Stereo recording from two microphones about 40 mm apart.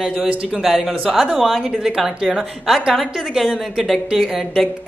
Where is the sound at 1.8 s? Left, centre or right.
Centre.